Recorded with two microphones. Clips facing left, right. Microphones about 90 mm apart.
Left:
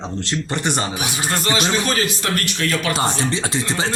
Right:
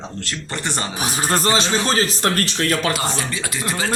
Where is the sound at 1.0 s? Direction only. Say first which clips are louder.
Right 2 dB; 40° right (ahead or behind).